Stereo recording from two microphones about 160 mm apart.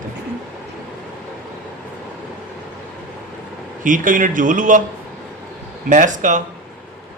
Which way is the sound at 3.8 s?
55° right (ahead or behind).